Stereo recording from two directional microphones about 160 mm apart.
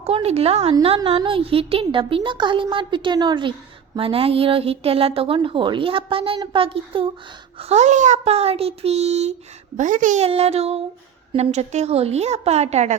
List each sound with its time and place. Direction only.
0.0 s a woman's voice: 40° right (ahead or behind)
9.7 s a child's voice: 55° right (ahead or behind)
10.2 s a woman's voice: 40° right (ahead or behind)